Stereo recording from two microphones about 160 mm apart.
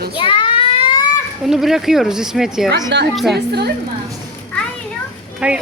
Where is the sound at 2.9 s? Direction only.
90° right.